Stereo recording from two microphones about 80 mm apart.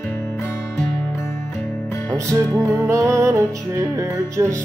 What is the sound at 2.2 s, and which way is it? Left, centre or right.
Music, right.